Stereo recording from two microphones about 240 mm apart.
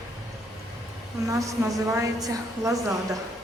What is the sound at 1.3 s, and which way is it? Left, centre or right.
A woman's voice, centre.